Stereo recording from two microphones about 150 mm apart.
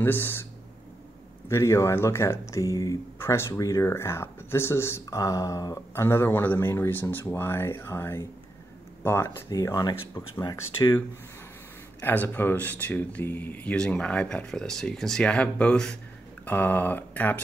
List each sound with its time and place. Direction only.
0.0 s speech: 15° left (ahead or behind)
1.5 s speech: 20° left (ahead or behind)
12.0 s speech: 15° left (ahead or behind)